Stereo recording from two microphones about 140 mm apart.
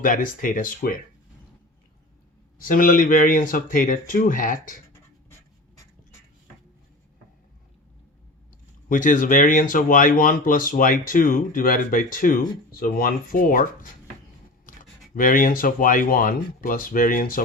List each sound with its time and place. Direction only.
0.0 s speech: 75° left (ahead or behind)
2.6 s speech: 80° left
8.9 s speech: 70° left (ahead or behind)
15.1 s speech: 75° left (ahead or behind)